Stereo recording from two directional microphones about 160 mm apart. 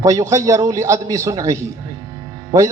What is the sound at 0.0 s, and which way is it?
A man's voice, 20° right (ahead or behind).